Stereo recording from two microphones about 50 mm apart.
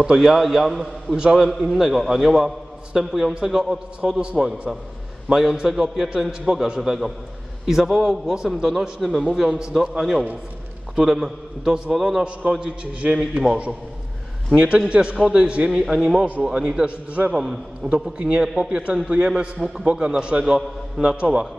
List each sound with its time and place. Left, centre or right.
0.0 s a man's voice: centre
1.1 s a man's voice: centre
1.4 s a man's voice: centre
4.0 s a man's voice: centre
4.4 s a man's voice: centre
14.5 s a man's voice: right
15.7 s a man's voice: centre
16.4 s a man's voice: centre
17.3 s a man's voice: centre